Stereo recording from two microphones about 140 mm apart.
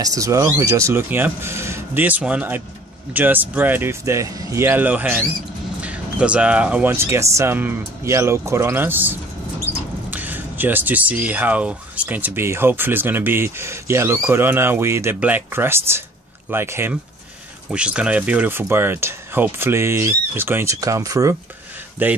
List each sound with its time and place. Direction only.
0.0 s speech: 25° right (ahead or behind)